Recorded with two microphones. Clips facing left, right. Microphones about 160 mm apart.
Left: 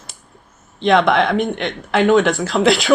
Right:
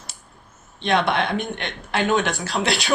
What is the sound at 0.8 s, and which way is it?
Speech, 90° left.